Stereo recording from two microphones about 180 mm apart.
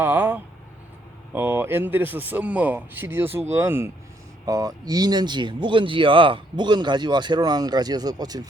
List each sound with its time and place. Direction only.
0.0 s a man's voice: 10° right (ahead or behind)